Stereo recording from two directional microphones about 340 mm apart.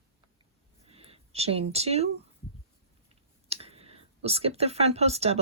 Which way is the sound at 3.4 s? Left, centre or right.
Centre.